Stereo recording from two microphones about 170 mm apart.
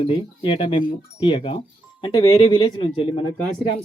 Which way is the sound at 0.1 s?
30° left (ahead or behind).